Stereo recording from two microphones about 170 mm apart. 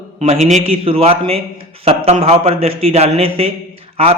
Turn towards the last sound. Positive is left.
turn(degrees=-35)  # may be behind; listen again after turning